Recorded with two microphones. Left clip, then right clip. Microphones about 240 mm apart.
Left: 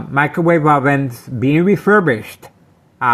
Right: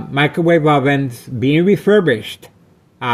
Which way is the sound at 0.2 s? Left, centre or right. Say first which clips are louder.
Even; left.